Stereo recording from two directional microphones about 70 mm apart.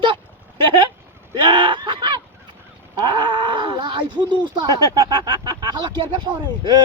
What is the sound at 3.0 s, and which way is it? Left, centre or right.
Groan, right.